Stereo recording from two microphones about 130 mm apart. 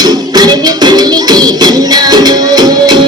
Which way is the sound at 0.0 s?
30° right (ahead or behind).